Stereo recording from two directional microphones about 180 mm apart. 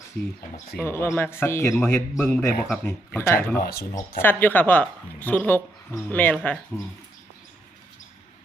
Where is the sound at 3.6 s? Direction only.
60° left (ahead or behind).